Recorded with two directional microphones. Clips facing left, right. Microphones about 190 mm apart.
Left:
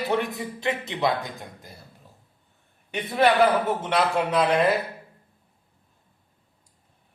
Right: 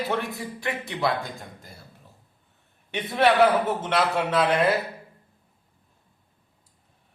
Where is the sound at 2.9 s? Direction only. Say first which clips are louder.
Even; centre (ahead or behind).